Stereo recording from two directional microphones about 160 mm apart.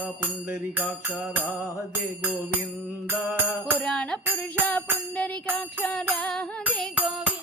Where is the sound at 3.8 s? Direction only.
5° left (ahead or behind).